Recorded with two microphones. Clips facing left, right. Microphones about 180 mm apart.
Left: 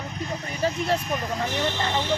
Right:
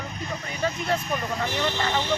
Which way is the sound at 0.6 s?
30° left (ahead or behind).